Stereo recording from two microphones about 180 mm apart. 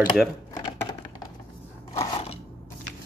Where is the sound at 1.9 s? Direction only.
30° left (ahead or behind).